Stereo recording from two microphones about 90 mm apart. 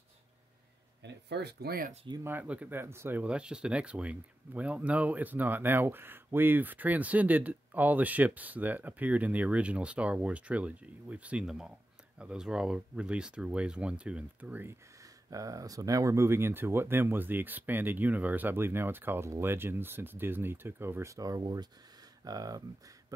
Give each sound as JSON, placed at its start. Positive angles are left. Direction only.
{"t": 2.2, "sound": "speech", "side_deg": -20}
{"t": 2.8, "sound": "speech", "side_deg": -25}
{"t": 3.3, "sound": "speech", "side_deg": -10}
{"t": 15.2, "sound": "speech", "side_deg": -40}